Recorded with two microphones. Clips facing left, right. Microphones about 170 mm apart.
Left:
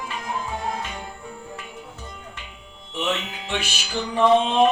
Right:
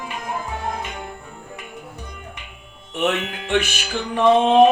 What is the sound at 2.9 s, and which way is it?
Music, 55° right (ahead or behind).